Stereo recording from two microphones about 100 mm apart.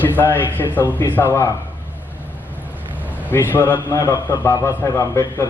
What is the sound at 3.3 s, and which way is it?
Speech, 20° left (ahead or behind).